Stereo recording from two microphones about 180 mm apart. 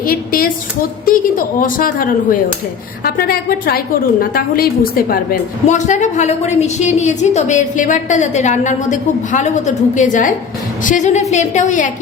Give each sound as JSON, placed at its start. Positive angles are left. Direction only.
{"t": 0.0, "sound": "a woman's voice", "side_deg": 50}